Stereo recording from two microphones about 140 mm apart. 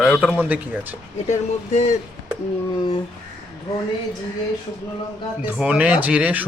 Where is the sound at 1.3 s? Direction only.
50° left (ahead or behind).